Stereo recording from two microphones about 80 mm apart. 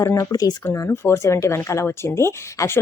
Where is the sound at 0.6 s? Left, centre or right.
Left.